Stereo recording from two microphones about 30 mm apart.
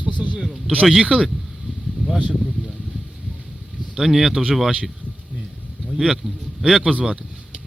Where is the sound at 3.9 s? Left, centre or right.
Centre.